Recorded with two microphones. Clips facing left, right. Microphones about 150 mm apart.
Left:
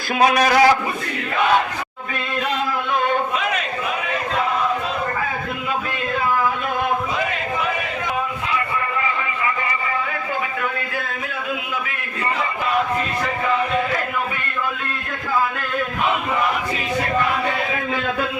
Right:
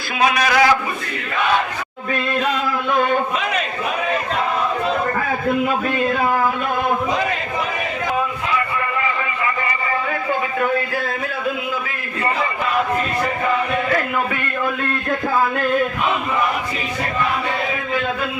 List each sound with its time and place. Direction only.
0.2 s a man's voice: 40° left (ahead or behind)